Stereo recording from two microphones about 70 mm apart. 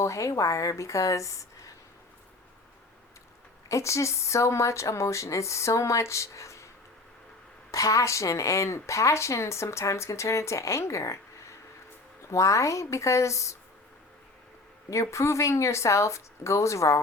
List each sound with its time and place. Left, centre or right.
0.0 s a woman's voice: left
3.7 s a woman's voice: left
7.7 s a woman's voice: left
15.1 s a woman's voice: left